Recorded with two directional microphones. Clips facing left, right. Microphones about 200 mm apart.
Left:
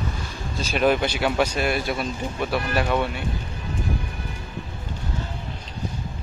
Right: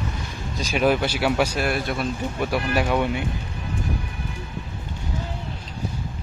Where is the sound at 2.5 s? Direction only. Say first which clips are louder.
Right 1 dB; 10° right (ahead or behind).